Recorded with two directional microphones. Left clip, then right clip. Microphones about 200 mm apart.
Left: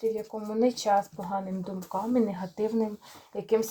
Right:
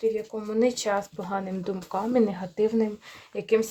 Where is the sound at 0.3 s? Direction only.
30° right (ahead or behind).